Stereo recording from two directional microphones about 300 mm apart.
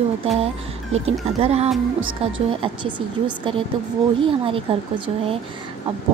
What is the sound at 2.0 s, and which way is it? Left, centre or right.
Speech, right.